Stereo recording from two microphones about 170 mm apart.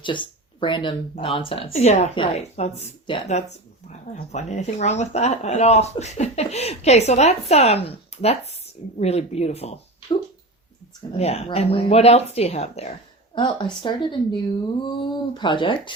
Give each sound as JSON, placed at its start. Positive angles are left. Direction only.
{"t": 0.0, "sound": "speech", "side_deg": 30}
{"t": 11.2, "sound": "speech", "side_deg": 40}
{"t": 13.3, "sound": "speech", "side_deg": 25}